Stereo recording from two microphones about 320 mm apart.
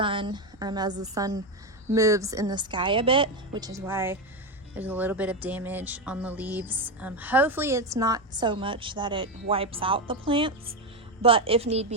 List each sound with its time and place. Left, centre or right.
0.0 s speech: centre